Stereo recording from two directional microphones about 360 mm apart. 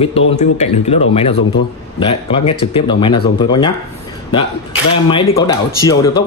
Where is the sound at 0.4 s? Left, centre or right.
Centre.